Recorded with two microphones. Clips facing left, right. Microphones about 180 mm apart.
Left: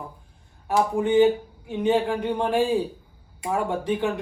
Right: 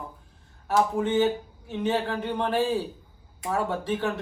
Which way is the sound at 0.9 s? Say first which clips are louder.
Left 5 dB; 15° left (ahead or behind).